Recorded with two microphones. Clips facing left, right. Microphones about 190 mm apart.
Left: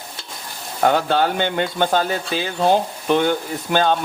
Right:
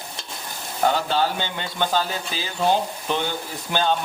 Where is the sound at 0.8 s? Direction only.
60° left (ahead or behind).